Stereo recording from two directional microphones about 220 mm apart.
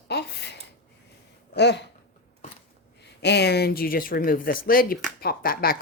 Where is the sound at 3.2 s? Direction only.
50° left (ahead or behind).